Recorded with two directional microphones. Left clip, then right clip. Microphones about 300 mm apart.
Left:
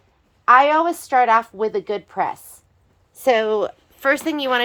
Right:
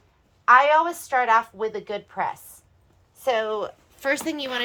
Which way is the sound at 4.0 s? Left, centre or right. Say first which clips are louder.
Left 6 dB; centre.